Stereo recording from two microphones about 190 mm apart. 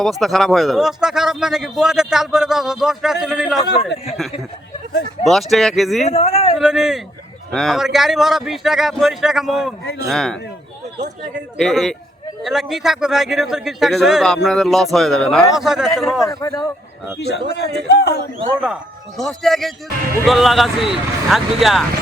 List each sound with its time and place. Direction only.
0.0 s speech: centre (ahead or behind)
5.2 s speech: centre (ahead or behind)
6.1 s speech: 30° left (ahead or behind)
6.6 s speech: 5° right (ahead or behind)
11.5 s speech: centre (ahead or behind)
16.2 s a man's voice: 15° left (ahead or behind)
17.2 s a man's voice: 60° left (ahead or behind)
18.6 s speech: centre (ahead or behind)